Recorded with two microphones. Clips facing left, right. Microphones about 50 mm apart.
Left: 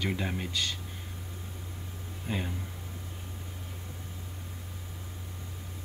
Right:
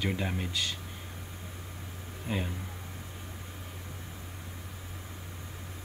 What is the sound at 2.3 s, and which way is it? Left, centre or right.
Speech, centre.